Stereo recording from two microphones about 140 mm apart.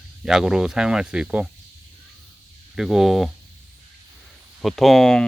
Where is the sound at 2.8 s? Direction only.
Centre (ahead or behind).